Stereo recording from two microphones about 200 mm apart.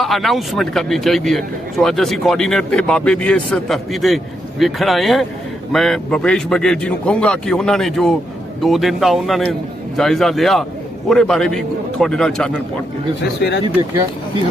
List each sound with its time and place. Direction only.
0.0 s a man's voice: centre (ahead or behind)
13.2 s speech: 55° left (ahead or behind)